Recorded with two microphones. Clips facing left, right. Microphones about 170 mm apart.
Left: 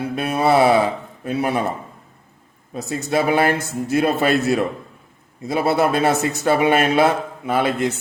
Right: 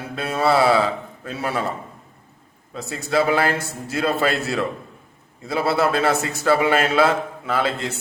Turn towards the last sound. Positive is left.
turn(degrees=20)  # may be behind; listen again after turning